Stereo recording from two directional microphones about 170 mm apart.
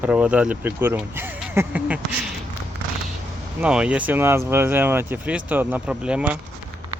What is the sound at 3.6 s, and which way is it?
Speech, 5° right (ahead or behind).